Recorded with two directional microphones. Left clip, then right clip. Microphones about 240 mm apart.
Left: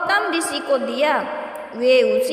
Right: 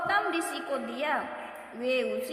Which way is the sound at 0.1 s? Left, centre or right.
Left.